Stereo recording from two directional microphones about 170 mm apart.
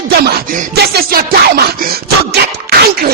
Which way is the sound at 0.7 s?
65° right (ahead or behind).